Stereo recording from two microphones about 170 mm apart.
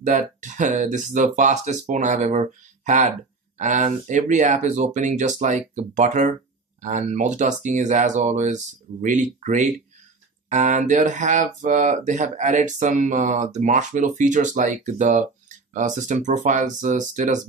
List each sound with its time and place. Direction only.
0.0 s speech: 50° right (ahead or behind)